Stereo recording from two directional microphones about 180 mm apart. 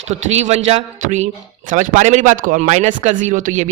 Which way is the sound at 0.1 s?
40° right (ahead or behind).